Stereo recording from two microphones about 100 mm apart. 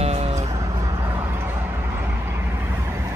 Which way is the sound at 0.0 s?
90° right.